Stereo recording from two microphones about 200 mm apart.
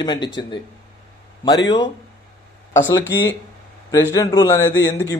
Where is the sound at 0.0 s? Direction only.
20° left (ahead or behind).